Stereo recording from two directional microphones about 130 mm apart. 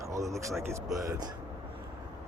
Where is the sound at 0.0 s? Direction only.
25° right (ahead or behind).